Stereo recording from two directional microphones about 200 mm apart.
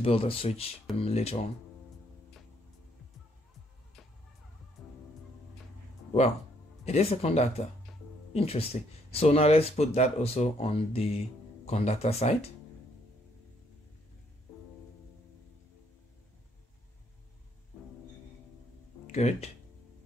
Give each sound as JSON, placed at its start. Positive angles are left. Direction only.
{"t": 0.0, "sound": "speech", "side_deg": 30}
{"t": 6.8, "sound": "speech", "side_deg": 30}
{"t": 19.0, "sound": "speech", "side_deg": 35}